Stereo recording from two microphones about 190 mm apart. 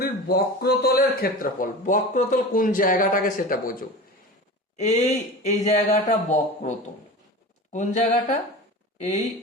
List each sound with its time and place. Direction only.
0.0 s a man's voice: 55° left (ahead or behind); by 9.2 s 40° left (ahead or behind)